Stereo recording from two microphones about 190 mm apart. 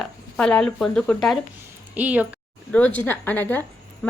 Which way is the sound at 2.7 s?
10° left (ahead or behind).